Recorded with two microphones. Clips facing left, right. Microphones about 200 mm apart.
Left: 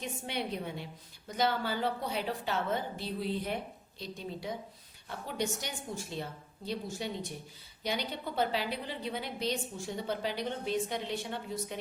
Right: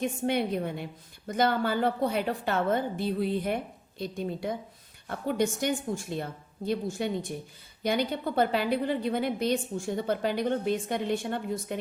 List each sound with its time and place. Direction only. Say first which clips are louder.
0.0 s a woman's voice: right 9 dB; 50° right (ahead or behind)